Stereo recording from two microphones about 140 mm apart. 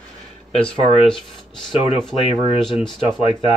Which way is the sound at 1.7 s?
40° left (ahead or behind).